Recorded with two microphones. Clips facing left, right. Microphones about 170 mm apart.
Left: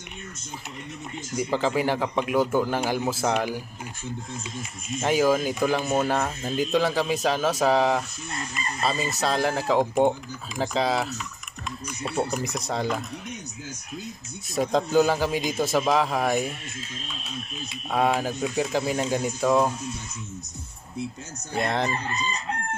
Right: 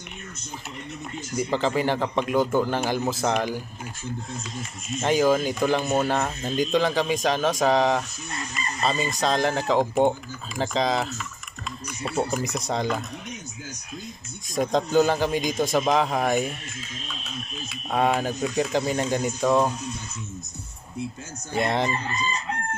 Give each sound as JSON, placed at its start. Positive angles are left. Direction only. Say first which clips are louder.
{"t": 1.5, "sound": "a man's voice", "louder": "even", "side_deg": 5}
{"t": 5.0, "sound": "speech", "louder": "right 1 dB", "side_deg": 5}
{"t": 12.2, "sound": "speech", "louder": "right 1 dB", "side_deg": 0}
{"t": 14.5, "sound": "speech", "louder": "even", "side_deg": 5}
{"t": 17.9, "sound": "speech", "louder": "right 1 dB", "side_deg": 5}
{"t": 21.5, "sound": "speech", "louder": "right 2 dB", "side_deg": 0}